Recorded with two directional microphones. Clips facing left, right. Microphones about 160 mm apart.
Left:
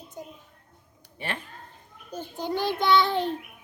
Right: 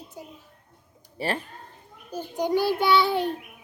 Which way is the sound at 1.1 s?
35° right (ahead or behind).